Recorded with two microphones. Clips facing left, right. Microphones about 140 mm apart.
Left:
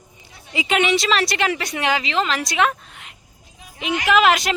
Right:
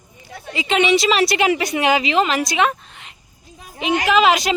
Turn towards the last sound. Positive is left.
turn(degrees=0)  # may be behind; listen again after turning